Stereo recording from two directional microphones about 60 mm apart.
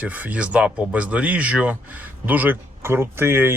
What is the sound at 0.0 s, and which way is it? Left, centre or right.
Speech, right.